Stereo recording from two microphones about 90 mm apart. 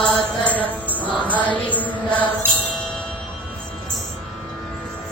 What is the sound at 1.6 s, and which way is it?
Mantra, 20° left (ahead or behind).